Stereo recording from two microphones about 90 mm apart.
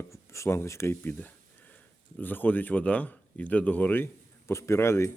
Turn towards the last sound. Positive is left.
turn(degrees=30)  # may be behind; listen again after turning